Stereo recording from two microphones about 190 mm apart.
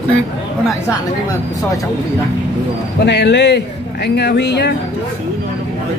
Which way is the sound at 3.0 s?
65° left (ahead or behind).